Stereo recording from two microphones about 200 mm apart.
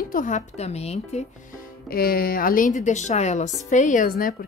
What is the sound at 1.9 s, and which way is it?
A woman's voice, 50° left (ahead or behind).